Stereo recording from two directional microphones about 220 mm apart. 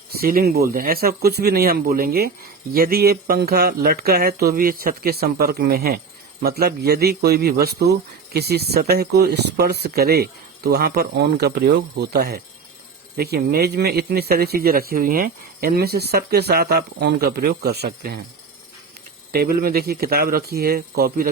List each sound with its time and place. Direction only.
0.1 s a man's voice: 40° right (ahead or behind)
19.3 s a man's voice: 45° right (ahead or behind)